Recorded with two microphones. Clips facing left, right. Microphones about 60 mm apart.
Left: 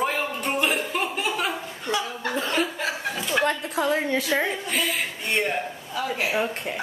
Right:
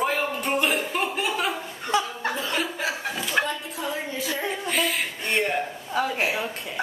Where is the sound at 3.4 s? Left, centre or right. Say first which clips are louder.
Left 6 dB; left.